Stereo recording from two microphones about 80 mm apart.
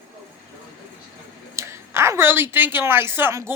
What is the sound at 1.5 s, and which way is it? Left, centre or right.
Speech, right.